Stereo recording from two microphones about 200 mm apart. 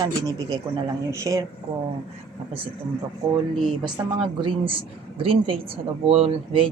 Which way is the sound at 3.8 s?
25° right (ahead or behind).